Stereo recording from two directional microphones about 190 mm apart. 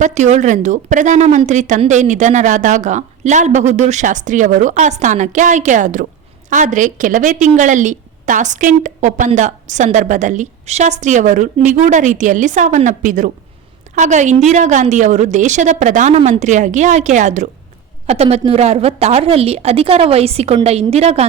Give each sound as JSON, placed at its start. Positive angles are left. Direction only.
{"t": 0.0, "sound": "a woman's voice", "side_deg": -40}